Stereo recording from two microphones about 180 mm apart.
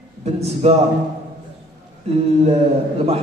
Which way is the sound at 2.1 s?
35° right (ahead or behind).